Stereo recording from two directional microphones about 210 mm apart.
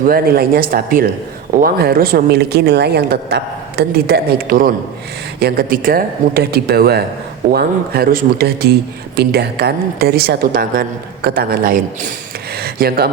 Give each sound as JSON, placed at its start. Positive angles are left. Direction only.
{"t": 0.0, "sound": "speech", "side_deg": -45}